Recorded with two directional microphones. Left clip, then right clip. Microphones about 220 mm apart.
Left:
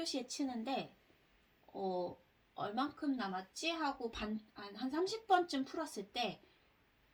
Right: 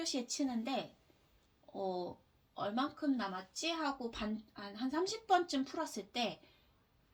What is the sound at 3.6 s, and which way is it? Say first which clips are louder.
Speech: right 1 dB; 35° right (ahead or behind).